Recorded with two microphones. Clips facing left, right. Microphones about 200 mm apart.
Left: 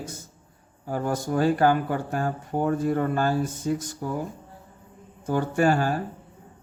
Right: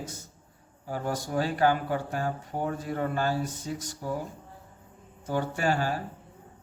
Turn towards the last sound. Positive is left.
turn(degrees=50)  # may be behind; listen again after turning